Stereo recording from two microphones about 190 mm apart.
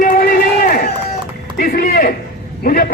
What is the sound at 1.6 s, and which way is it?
Speech, 50° left (ahead or behind).